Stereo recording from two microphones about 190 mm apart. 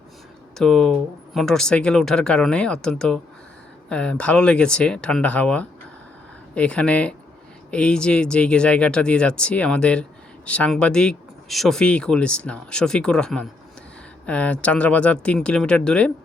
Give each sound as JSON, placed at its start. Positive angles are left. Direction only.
{"t": 0.6, "sound": "speech", "side_deg": 5}